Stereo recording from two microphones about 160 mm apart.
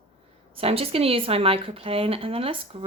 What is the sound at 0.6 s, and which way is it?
Speech, 35° right (ahead or behind).